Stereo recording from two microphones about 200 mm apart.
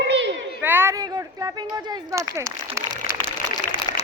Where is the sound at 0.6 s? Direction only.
10° right (ahead or behind).